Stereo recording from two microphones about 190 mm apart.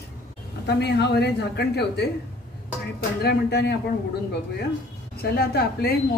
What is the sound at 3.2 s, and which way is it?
Speech, 60° left (ahead or behind).